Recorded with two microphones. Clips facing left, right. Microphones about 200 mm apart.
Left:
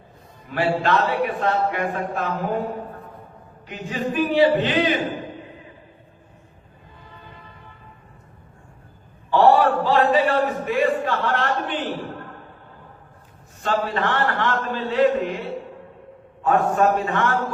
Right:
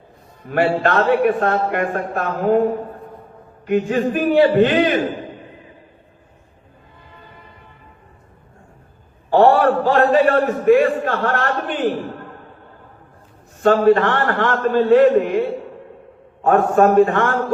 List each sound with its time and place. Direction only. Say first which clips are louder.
0.5 s a man's voice: right 4 dB; 50° right (ahead or behind)
3.8 s a sound: right 12 dB; 70° right (ahead or behind)
4.1 s a man's voice: right 2 dB; 50° right (ahead or behind)
9.3 s a man's voice: right 3 dB; 50° right (ahead or behind)
13.6 s a man's voice: right 10 dB; 55° right (ahead or behind)